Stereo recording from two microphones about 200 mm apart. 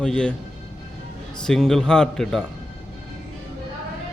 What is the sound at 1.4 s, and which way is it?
Speech, centre (ahead or behind).